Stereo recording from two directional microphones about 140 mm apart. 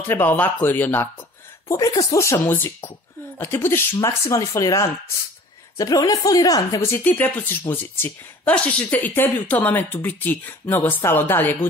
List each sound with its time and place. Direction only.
0.1 s speech: 15° left (ahead or behind)
1.7 s speech: 25° left (ahead or behind)